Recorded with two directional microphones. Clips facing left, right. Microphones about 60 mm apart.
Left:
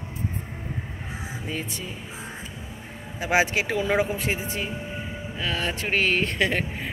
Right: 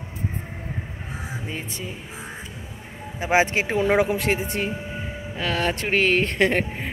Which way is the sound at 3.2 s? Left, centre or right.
Right.